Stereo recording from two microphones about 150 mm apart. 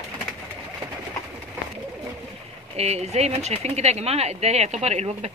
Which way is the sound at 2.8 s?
45° right (ahead or behind).